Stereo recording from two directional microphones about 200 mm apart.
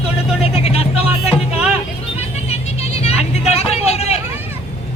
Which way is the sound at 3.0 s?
35° left (ahead or behind).